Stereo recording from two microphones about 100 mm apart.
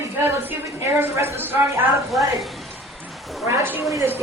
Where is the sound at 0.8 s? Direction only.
25° right (ahead or behind).